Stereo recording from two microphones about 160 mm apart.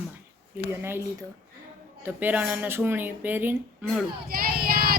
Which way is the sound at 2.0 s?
10° right (ahead or behind).